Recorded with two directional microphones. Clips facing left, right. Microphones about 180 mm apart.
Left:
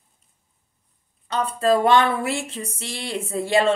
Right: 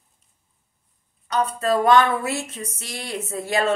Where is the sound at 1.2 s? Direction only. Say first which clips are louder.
Left 2 dB; 30° left (ahead or behind).